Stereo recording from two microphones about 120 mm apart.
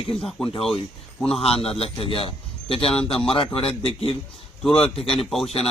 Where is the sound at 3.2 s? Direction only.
50° left (ahead or behind).